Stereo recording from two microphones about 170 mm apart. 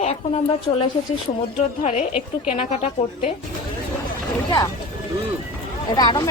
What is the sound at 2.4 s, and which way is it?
Speech, 40° left (ahead or behind).